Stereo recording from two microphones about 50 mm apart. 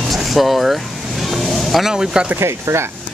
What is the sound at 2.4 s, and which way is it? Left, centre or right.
Speech, right.